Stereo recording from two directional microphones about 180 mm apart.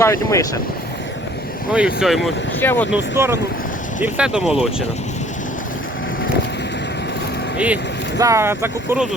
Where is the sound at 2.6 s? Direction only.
10° left (ahead or behind).